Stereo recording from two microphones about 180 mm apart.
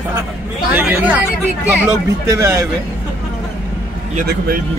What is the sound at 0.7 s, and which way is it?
Speech, 15° right (ahead or behind).